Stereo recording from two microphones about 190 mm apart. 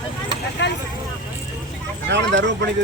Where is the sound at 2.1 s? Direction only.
70° right (ahead or behind).